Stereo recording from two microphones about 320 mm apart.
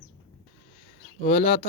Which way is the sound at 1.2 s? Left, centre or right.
Left.